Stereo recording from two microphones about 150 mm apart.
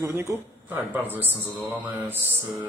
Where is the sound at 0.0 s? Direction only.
20° right (ahead or behind).